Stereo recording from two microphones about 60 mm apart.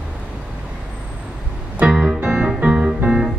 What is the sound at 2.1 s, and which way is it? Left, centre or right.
Music, right.